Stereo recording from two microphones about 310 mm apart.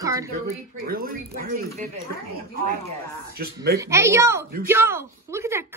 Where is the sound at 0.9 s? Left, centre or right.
Right.